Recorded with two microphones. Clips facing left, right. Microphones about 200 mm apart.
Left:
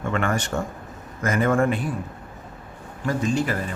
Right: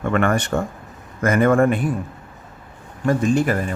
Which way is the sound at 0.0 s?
60° right (ahead or behind).